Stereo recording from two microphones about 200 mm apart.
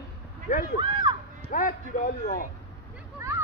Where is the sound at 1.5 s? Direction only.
40° left (ahead or behind).